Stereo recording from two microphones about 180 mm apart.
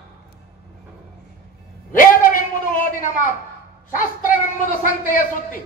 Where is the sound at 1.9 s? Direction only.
50° left (ahead or behind).